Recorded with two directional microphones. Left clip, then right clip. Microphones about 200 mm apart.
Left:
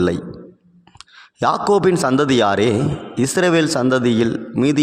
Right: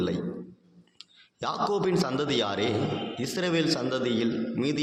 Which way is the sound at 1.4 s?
55° left (ahead or behind).